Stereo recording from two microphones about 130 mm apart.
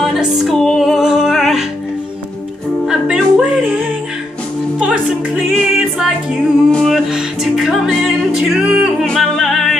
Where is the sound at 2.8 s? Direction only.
5° right (ahead or behind).